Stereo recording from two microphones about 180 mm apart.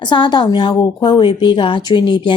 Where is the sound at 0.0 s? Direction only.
25° left (ahead or behind).